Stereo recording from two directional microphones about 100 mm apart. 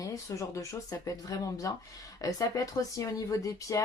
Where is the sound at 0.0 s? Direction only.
35° left (ahead or behind).